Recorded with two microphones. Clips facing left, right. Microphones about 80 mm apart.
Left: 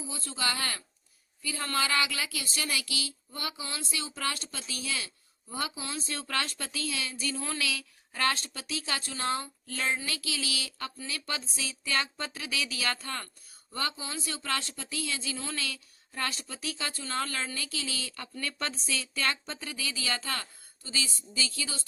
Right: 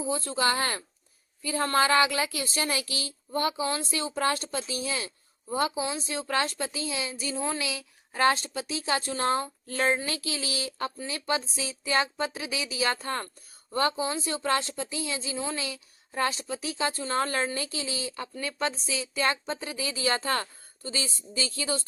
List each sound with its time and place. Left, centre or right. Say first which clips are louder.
0.0 s speech: right 8 dB; right
5.7 s speech: right 6 dB; centre; by 21.8 s right